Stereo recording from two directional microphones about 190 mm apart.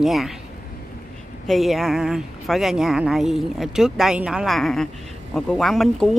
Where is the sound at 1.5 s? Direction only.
Centre (ahead or behind).